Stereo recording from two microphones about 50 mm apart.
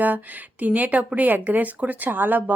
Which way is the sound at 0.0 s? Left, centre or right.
Right.